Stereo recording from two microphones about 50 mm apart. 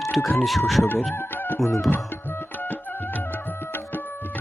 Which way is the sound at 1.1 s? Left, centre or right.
Left.